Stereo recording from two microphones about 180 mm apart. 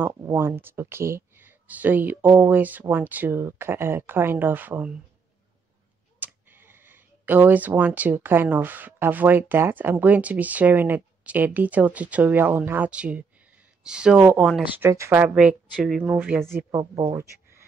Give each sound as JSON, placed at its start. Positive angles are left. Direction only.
{"t": 0.0, "sound": "speech", "side_deg": -15}
{"t": 6.1, "sound": "speech", "side_deg": -10}
{"t": 16.5, "sound": "speech", "side_deg": -20}